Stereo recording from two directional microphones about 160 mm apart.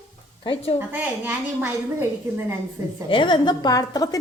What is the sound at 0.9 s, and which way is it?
Speech, 10° right (ahead or behind).